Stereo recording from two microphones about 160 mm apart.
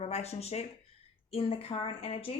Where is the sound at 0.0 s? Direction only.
40° left (ahead or behind).